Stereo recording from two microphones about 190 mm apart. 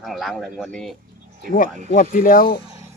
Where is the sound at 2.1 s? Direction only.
45° left (ahead or behind).